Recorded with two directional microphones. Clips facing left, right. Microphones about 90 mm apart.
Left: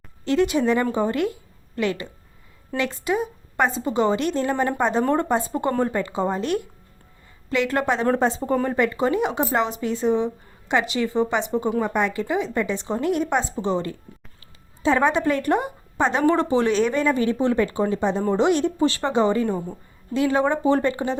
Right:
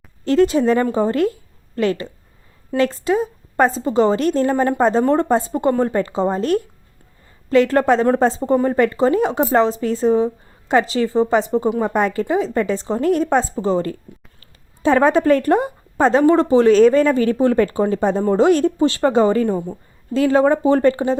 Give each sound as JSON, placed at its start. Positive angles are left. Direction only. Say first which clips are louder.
{"t": 0.3, "sound": "speech", "louder": "right 5 dB", "side_deg": -35}